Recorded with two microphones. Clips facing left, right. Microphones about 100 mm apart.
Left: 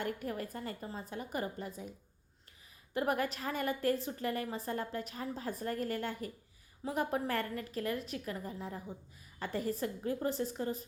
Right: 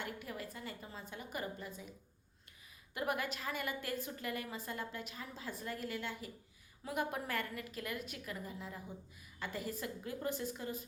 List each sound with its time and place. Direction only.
0.0 s a woman's voice: 45° left (ahead or behind)
2.9 s a woman's voice: 40° left (ahead or behind)